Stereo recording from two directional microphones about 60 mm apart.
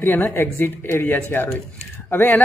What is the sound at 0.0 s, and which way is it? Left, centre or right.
A woman's voice, left.